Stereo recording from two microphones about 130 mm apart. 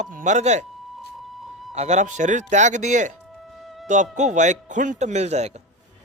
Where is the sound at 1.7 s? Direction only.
60° right (ahead or behind).